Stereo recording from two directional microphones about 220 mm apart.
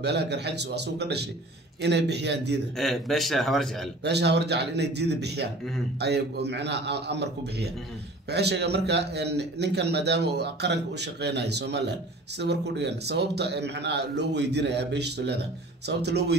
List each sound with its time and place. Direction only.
0.0 s a man's voice: 50° right (ahead or behind)
2.8 s speech: centre (ahead or behind)
4.0 s a man's voice: 50° right (ahead or behind)